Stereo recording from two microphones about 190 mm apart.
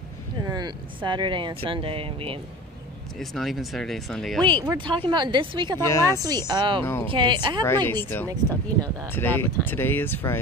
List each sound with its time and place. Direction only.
0.4 s speech: 20° right (ahead or behind)
3.2 s speech: centre (ahead or behind)
4.7 s speech: 25° right (ahead or behind)
5.8 s speech: 15° left (ahead or behind)
6.2 s speech: 20° right (ahead or behind)
6.8 s speech: 10° left (ahead or behind)
7.1 s speech: 25° right (ahead or behind)
7.6 s speech: 10° left (ahead or behind)